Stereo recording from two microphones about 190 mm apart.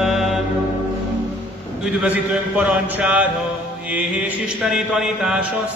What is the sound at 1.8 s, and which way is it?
Mantra, 5° right (ahead or behind).